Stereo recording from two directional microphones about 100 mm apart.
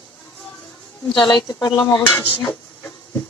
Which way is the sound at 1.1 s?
50° left (ahead or behind).